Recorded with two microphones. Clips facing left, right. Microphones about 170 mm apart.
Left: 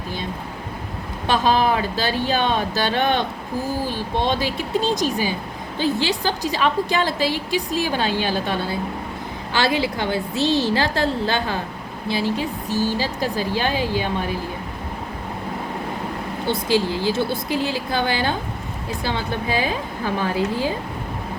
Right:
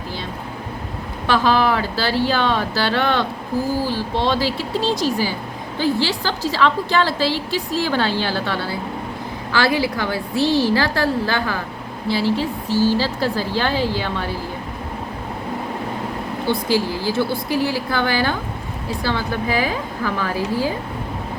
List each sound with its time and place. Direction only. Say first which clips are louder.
1.3 s a woman's voice: right 1 dB; 20° left (ahead or behind)
16.5 s a woman's voice: even; 20° left (ahead or behind)